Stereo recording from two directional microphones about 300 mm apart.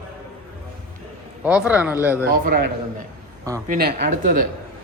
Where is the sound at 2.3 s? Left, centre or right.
Right.